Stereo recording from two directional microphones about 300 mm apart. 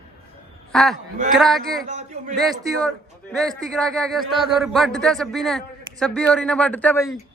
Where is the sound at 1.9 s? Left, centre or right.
Right.